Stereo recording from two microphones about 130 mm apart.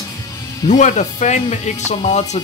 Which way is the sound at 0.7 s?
70° left (ahead or behind).